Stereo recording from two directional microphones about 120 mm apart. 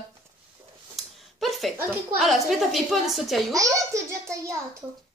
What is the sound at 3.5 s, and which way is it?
Speech, 30° right (ahead or behind).